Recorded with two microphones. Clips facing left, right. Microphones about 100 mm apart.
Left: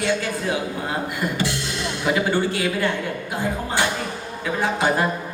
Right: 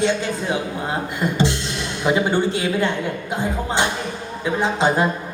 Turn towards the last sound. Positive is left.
turn(degrees=-20)  # may be behind; listen again after turning